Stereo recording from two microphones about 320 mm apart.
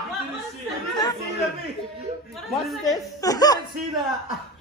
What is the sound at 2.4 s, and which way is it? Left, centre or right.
Speech, centre.